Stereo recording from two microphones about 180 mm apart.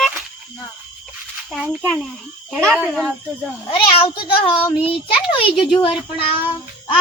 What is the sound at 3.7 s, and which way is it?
A child's voice, 30° left (ahead or behind).